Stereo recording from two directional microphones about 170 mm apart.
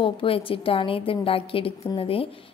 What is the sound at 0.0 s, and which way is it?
A woman's voice, 30° left (ahead or behind).